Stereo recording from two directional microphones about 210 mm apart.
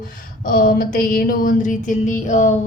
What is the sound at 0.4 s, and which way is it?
A woman's voice, 40° left (ahead or behind).